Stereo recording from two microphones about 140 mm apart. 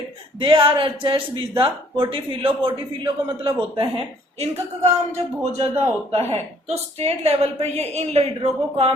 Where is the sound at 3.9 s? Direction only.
45° right (ahead or behind).